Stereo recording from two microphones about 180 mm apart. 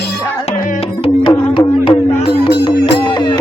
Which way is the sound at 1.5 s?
25° left (ahead or behind).